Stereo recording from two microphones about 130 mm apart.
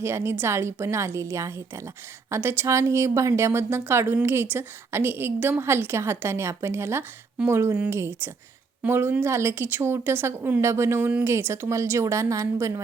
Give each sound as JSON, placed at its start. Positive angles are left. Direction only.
{"t": 0.0, "sound": "a woman's voice", "side_deg": -20}